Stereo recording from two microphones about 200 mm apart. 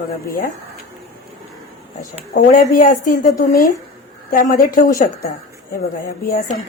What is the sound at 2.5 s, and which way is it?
A woman's voice, 40° left (ahead or behind).